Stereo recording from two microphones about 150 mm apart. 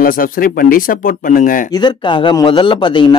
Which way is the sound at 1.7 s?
30° left (ahead or behind).